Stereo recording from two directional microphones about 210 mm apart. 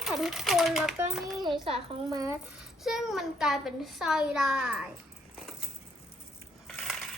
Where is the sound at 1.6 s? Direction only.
25° right (ahead or behind).